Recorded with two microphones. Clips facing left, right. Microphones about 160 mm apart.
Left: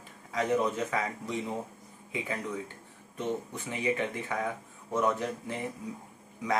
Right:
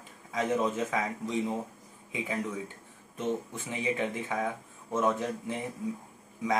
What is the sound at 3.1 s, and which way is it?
Speech, 15° left (ahead or behind).